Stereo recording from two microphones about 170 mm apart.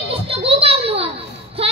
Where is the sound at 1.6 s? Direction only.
35° right (ahead or behind).